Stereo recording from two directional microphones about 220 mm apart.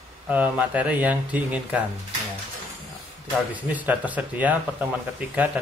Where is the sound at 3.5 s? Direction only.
5° right (ahead or behind).